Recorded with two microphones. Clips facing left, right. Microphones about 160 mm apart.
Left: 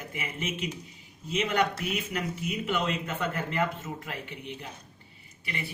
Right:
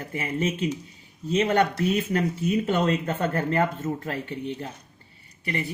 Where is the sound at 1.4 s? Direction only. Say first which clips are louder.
Right 5 dB; 55° right (ahead or behind).